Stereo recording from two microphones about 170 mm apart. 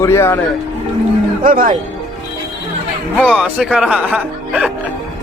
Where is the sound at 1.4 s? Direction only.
55° right (ahead or behind).